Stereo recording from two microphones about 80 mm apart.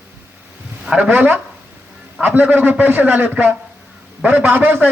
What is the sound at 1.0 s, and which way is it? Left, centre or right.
A man's voice, right.